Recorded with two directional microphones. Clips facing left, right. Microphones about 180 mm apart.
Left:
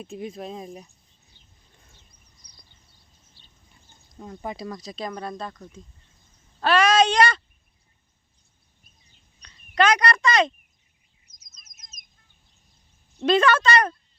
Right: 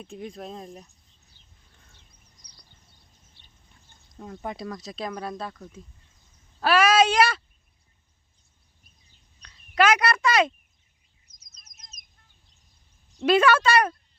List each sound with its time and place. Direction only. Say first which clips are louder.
0.0 s speech: left 3 dB; 5° left (ahead or behind)
4.2 s speech: left 1 dB; centre (ahead or behind)
9.4 s a sound: even; 5° right (ahead or behind)
11.3 s chirp: right 2 dB; 60° right (ahead or behind)
13.2 s speech: even; 10° right (ahead or behind)